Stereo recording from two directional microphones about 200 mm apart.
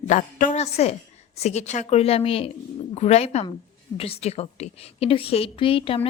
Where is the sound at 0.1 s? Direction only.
40° left (ahead or behind).